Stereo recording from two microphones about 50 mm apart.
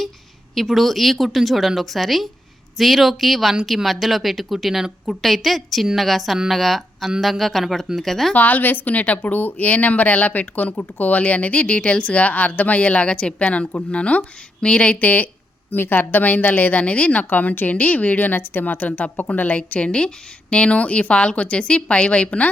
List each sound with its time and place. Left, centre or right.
0.5 s speech: centre
8.3 s a woman's voice: left
15.0 s a woman's voice: left